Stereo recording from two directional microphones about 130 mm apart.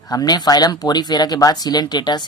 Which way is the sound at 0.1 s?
30° left (ahead or behind).